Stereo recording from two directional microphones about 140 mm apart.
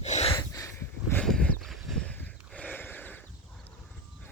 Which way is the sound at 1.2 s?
5° left (ahead or behind).